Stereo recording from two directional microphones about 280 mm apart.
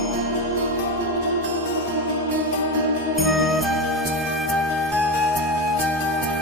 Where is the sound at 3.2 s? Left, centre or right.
Centre.